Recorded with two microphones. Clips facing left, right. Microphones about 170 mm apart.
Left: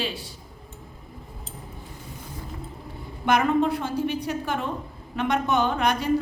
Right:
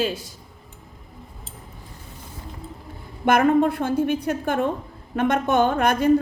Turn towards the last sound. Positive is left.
turn(degrees=-50)  # may be behind; listen again after turning